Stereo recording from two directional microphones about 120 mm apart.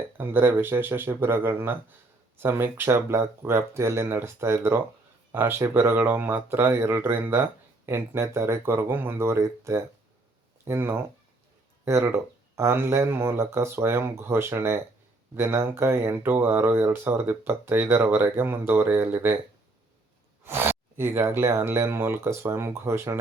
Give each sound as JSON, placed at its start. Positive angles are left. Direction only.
{"t": 0.2, "sound": "speech", "side_deg": -20}
{"t": 20.4, "sound": "speech", "side_deg": -20}